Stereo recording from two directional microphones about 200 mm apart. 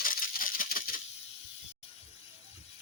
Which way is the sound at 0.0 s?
45° left (ahead or behind).